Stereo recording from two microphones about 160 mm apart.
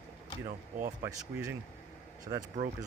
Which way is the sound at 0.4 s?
50° right (ahead or behind).